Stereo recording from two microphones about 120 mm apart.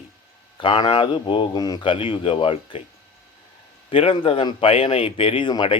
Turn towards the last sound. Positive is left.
turn(degrees=45)  # may be behind; listen again after turning